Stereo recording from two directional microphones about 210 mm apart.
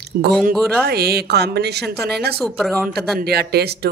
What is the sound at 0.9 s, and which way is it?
A woman's voice, 50° right (ahead or behind).